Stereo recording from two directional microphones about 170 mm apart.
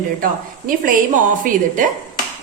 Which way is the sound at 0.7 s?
55° right (ahead or behind).